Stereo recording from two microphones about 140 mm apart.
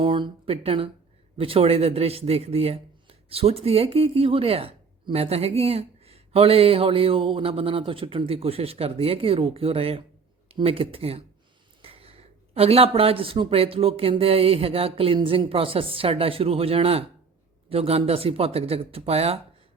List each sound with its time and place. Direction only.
0.0 s a man's voice: 35° right (ahead or behind)